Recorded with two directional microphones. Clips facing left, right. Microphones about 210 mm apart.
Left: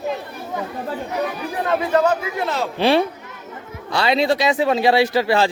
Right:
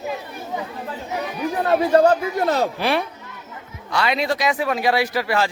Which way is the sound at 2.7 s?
30° left (ahead or behind).